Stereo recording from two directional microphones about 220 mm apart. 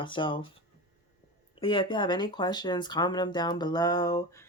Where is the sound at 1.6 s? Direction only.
20° left (ahead or behind).